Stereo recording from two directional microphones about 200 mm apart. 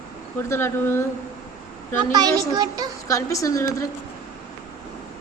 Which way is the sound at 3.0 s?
15° left (ahead or behind).